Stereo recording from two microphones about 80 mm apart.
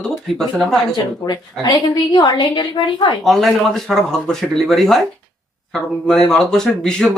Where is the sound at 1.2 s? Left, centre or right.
Left.